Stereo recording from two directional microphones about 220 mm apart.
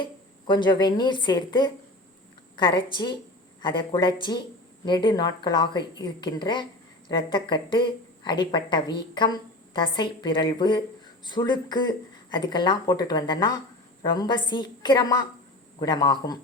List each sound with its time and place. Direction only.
0.0 s a woman's voice: 20° left (ahead or behind)